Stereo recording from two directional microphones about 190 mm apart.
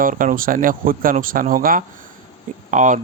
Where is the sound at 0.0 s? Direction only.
45° right (ahead or behind).